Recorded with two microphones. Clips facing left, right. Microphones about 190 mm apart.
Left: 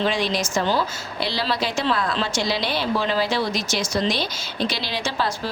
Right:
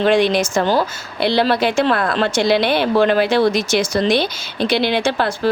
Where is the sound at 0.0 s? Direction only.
60° right (ahead or behind).